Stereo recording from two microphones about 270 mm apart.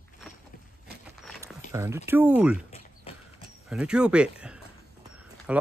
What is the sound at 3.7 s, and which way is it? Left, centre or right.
Speech, centre.